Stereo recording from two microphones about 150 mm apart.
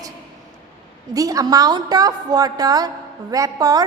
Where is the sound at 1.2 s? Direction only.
25° right (ahead or behind).